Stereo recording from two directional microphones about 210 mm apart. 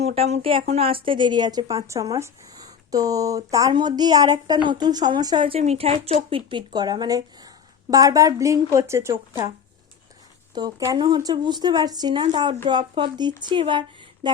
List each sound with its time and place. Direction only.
0.0 s speech: 30° right (ahead or behind); by 9.5 s 15° right (ahead or behind)
10.5 s speech: 15° right (ahead or behind)